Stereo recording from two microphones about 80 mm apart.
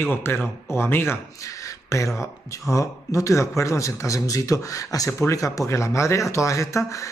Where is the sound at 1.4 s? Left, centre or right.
Left.